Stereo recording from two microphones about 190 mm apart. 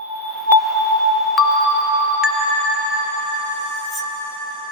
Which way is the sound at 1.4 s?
Centre (ahead or behind).